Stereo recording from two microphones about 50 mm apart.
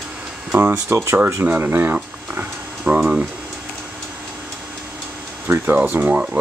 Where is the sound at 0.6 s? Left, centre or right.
Right.